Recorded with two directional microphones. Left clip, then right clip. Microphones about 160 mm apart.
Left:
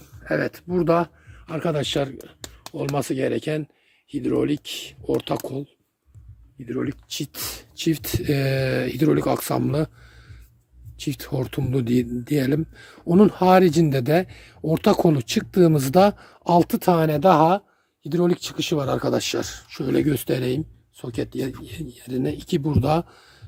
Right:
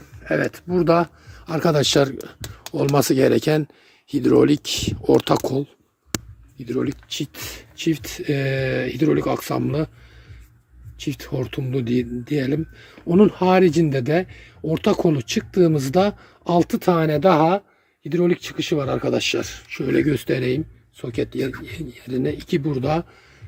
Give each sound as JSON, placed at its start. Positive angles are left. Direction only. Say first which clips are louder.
{"t": 0.2, "sound": "speech", "louder": "right 2 dB", "side_deg": 0}
{"t": 1.5, "sound": "speech", "louder": "right 6 dB", "side_deg": -40}
{"t": 6.7, "sound": "speech", "louder": "right 4 dB", "side_deg": -10}
{"t": 7.1, "sound": "speech", "louder": "right 2 dB", "side_deg": 10}
{"t": 10.9, "sound": "speech", "louder": "right 1 dB", "side_deg": 20}